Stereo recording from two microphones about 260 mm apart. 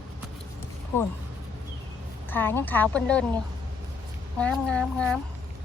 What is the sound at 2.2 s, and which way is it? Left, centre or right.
Speech, centre.